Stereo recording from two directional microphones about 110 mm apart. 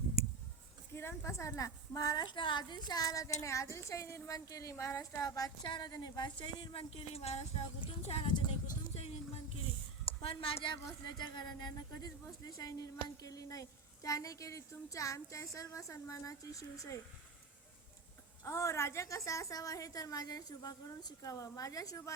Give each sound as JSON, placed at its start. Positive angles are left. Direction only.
{"t": 0.9, "sound": "a woman's voice", "side_deg": 25}
{"t": 6.4, "sound": "speech", "side_deg": 55}
{"t": 8.3, "sound": "a sound", "side_deg": 40}
{"t": 9.0, "sound": "a sound", "side_deg": 70}
{"t": 10.2, "sound": "speech", "side_deg": 55}
{"t": 11.0, "sound": "a woman's voice", "side_deg": 40}
{"t": 18.4, "sound": "a woman's voice", "side_deg": 25}